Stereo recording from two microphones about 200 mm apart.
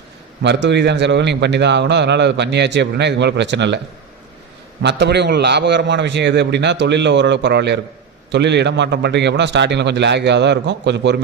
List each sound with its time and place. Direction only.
0.4 s a man's voice: 60° right (ahead or behind)
4.8 s a man's voice: 60° right (ahead or behind)